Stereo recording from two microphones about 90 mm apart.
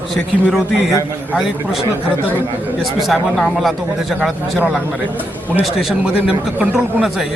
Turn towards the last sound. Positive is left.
turn(degrees=-5)  # may be behind; listen again after turning